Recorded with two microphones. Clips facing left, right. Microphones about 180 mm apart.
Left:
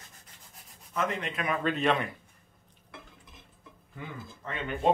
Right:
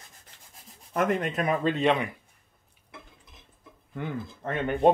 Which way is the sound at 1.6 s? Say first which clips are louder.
Right 1 dB; 20° right (ahead or behind).